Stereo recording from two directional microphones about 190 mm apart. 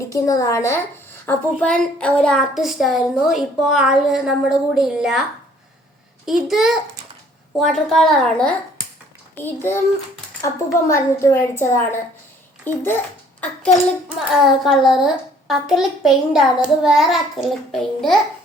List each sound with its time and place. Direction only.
0.1 s a woman's voice: 15° left (ahead or behind); by 5.2 s 5° right (ahead or behind)
6.2 s a woman's voice: centre (ahead or behind)
14.6 s a woman's voice: centre (ahead or behind)